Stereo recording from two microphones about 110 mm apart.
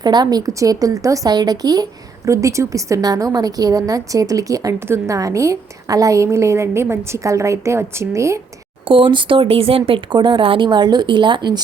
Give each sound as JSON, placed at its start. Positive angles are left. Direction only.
{"t": 0.0, "sound": "speech", "side_deg": -40}
{"t": 8.8, "sound": "speech", "side_deg": -50}